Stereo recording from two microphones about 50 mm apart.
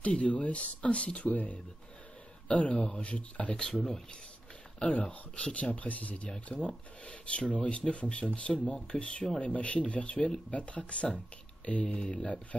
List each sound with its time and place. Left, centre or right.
0.0 s speech: left
4.7 s speech: left